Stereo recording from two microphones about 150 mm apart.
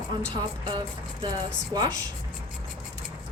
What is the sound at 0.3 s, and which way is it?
A woman's voice, 30° right (ahead or behind).